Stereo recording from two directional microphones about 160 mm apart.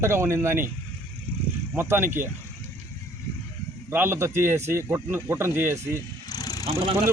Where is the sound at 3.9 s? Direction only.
15° right (ahead or behind).